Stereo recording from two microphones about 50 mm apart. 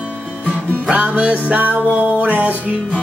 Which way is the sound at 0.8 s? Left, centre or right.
Right.